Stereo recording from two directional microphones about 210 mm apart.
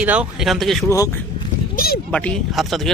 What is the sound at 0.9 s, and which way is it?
Speech, 15° left (ahead or behind).